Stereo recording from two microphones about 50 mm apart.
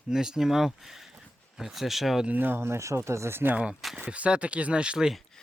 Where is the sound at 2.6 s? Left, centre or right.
Right.